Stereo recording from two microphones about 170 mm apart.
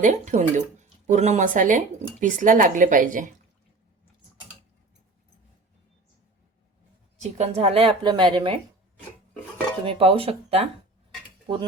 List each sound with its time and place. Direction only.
0.0 s speech: 45° right (ahead or behind)
7.2 s a woman's voice: 40° right (ahead or behind)
9.8 s a woman's voice: 35° right (ahead or behind)